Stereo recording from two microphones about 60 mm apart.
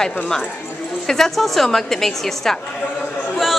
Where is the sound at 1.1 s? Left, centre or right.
Centre.